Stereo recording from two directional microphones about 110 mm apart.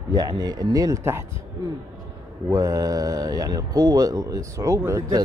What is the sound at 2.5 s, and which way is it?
Speech, 30° right (ahead or behind).